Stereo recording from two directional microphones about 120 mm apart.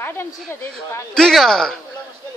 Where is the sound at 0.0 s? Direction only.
20° left (ahead or behind).